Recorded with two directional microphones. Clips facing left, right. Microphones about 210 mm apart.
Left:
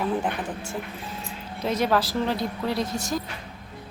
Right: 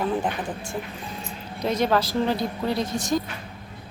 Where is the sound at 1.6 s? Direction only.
5° left (ahead or behind).